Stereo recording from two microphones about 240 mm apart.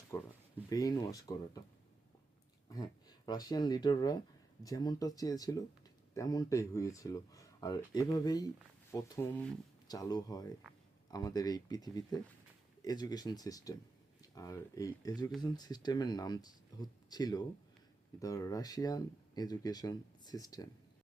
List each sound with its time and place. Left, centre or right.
0.1 s speech: centre
2.6 s speech: centre